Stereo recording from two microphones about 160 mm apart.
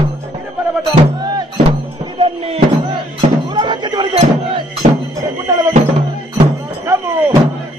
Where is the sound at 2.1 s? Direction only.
35° right (ahead or behind).